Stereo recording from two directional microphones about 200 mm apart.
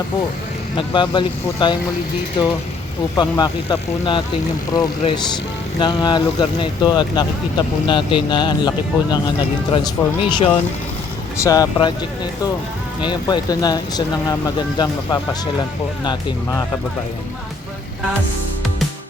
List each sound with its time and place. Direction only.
0.8 s speech: 25° left (ahead or behind)
3.2 s speech: 20° left (ahead or behind)
13.0 s speech: 20° left (ahead or behind)